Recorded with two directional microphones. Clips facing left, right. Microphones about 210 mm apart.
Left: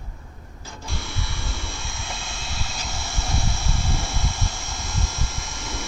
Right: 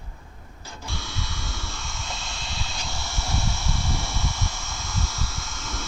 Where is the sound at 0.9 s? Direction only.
10° left (ahead or behind).